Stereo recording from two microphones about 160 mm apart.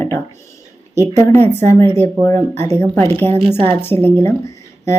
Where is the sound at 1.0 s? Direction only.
15° left (ahead or behind).